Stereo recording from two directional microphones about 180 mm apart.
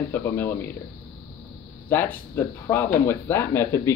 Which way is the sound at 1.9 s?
10° left (ahead or behind).